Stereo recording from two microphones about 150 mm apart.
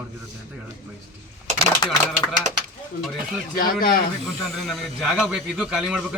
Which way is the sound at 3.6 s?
75° left (ahead or behind).